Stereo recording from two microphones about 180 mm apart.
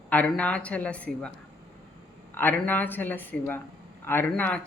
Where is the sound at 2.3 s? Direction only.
10° left (ahead or behind).